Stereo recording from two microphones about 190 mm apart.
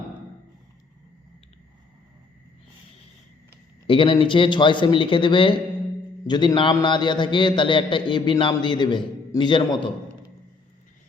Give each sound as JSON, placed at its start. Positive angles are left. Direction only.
{"t": 3.8, "sound": "a man's voice", "side_deg": 25}